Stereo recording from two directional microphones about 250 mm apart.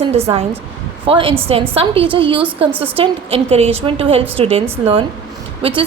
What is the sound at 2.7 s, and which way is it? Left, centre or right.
Speech, centre.